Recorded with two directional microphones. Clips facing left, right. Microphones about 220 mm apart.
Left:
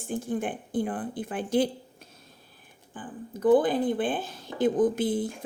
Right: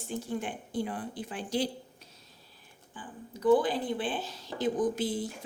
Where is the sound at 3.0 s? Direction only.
55° left (ahead or behind).